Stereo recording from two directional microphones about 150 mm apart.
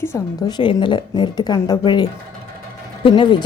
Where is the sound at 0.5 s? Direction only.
35° left (ahead or behind).